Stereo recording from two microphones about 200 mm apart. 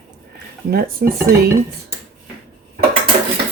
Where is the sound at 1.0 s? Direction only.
55° right (ahead or behind).